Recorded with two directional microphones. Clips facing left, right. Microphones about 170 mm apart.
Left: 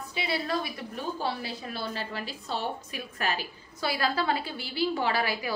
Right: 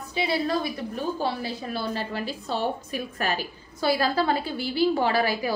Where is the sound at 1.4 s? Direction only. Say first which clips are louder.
Right 5 dB; 45° right (ahead or behind).